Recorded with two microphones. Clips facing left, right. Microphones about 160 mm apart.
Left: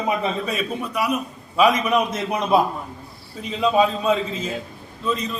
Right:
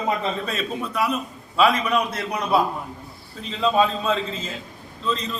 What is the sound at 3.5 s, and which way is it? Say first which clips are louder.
Speech: left 2 dB; 10° left (ahead or behind).